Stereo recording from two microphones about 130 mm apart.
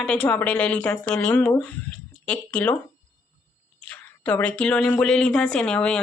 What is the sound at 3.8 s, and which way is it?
A woman's voice, 10° left (ahead or behind).